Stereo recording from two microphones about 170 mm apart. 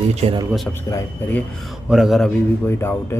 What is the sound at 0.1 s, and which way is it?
Speech, 40° right (ahead or behind).